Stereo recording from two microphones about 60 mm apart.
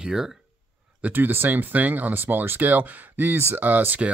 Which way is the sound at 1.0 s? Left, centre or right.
Right.